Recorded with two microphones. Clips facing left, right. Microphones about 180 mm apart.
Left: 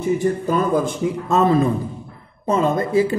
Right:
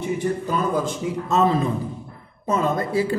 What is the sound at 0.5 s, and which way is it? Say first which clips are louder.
A man's voice: left 5 dB; 50° left (ahead or behind).